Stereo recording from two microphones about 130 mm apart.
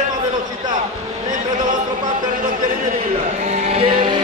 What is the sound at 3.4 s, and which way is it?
Music, 60° right (ahead or behind).